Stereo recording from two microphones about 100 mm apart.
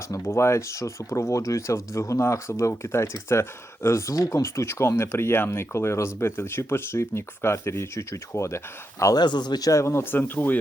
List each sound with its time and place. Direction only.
0.1 s speech: 25° left (ahead or behind)
9.1 s speech: 45° left (ahead or behind); by 10.6 s 20° left (ahead or behind)